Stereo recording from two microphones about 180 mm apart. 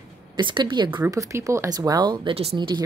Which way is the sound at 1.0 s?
15° right (ahead or behind).